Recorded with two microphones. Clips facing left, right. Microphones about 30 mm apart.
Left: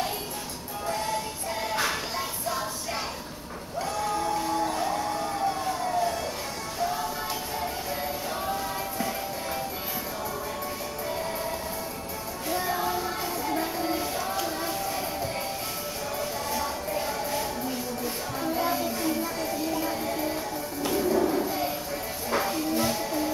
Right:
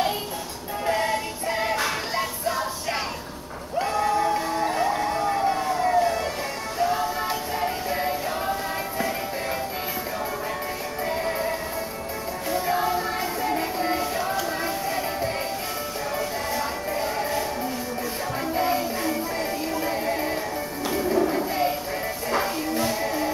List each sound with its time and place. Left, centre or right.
0.8 s music: right
3.8 s a sound: right
6.8 s music: right
11.1 s music: right
12.6 s music: right
14.4 s a sound: right
15.0 s music: right
18.4 s music: right